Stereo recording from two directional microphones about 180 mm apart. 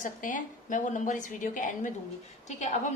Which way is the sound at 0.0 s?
45° left (ahead or behind).